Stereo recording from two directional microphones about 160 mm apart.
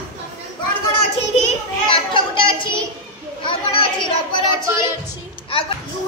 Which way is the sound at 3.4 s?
30° left (ahead or behind).